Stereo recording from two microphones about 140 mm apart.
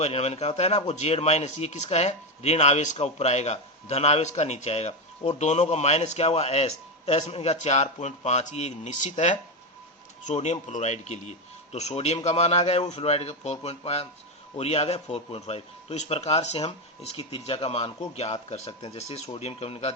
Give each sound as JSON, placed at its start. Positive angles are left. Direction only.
{"t": 0.0, "sound": "speech", "side_deg": 45}